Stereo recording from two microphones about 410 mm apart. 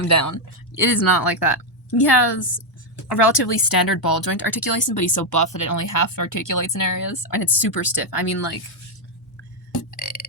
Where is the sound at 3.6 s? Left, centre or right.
Left.